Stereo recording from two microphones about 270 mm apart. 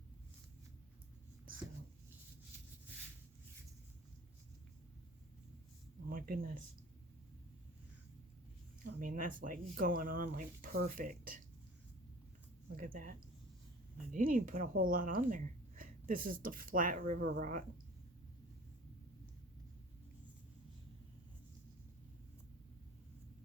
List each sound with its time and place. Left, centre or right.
6.1 s speech: right
8.8 s speech: right
12.7 s speech: right